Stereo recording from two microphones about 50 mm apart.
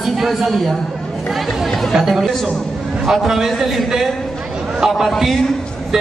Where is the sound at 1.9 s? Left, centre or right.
Centre.